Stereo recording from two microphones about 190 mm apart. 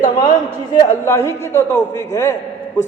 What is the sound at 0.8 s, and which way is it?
A man's voice, 15° left (ahead or behind).